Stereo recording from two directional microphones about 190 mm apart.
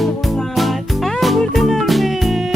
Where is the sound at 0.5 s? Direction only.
Centre (ahead or behind).